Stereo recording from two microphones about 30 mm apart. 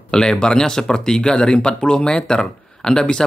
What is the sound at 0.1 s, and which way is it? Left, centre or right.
Speech, left.